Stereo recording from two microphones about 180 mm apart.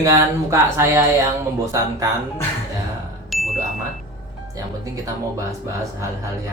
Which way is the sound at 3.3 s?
Centre (ahead or behind).